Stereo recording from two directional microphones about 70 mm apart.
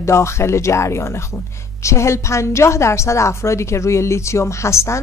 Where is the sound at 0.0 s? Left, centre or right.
Left.